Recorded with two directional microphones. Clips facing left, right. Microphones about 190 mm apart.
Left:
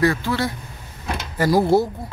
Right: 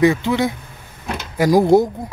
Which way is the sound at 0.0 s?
20° right (ahead or behind).